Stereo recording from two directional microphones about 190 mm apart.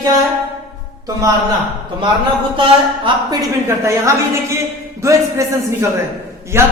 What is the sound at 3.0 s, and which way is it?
Speech, 20° right (ahead or behind).